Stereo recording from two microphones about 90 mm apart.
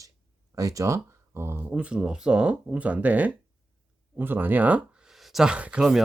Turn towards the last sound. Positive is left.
turn(degrees=-10)  # may be behind; listen again after turning